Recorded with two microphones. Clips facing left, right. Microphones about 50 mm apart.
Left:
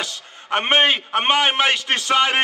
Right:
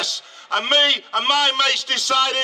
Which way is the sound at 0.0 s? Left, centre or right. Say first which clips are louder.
Even; left.